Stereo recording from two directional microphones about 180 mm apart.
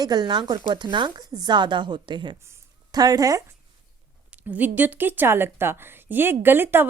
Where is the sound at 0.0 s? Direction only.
25° right (ahead or behind).